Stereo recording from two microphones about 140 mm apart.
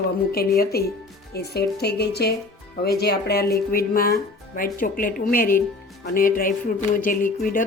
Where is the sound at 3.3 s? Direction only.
90° left.